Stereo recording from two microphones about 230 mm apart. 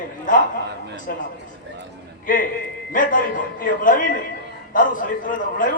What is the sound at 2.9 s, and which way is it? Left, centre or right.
A man's voice, left.